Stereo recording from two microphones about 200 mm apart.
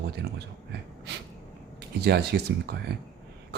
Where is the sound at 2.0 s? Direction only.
55° right (ahead or behind).